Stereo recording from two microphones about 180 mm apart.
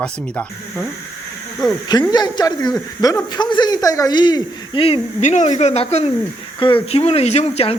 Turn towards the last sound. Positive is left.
turn(degrees=35)  # may be behind; listen again after turning